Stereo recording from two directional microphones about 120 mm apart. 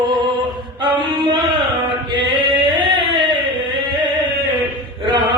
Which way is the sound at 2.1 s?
40° right (ahead or behind).